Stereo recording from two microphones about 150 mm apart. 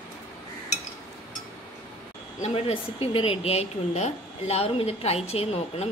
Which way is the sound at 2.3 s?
45° left (ahead or behind).